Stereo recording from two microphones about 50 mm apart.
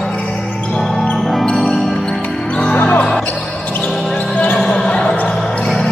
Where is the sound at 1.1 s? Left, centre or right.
Centre.